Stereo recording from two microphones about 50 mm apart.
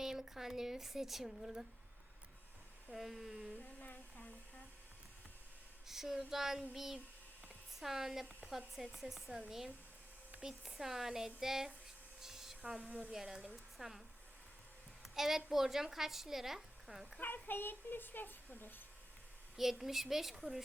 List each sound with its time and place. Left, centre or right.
0.0 s speech: centre
2.9 s a woman's voice: centre
3.8 s humming: left
5.9 s speech: centre
12.2 s a sound: centre
12.9 s speech: right
13.1 s speech: centre
15.0 s a woman's voice: centre
17.2 s speech: left
19.5 s a woman's voice: centre